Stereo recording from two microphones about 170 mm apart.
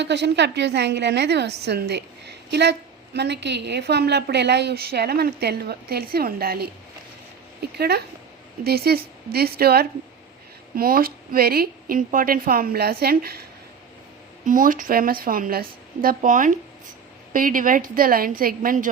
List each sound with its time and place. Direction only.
0.0 s a woman's voice: 90° right; by 13.4 s 65° right (ahead or behind)
14.4 s a woman's voice: 55° right (ahead or behind)